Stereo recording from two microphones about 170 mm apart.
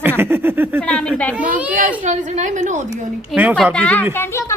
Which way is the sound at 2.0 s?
45° right (ahead or behind).